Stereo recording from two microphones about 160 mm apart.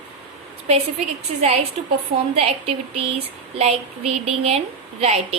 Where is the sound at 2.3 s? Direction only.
40° right (ahead or behind).